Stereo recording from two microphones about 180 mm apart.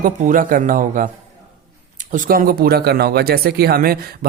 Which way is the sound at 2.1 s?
50° right (ahead or behind).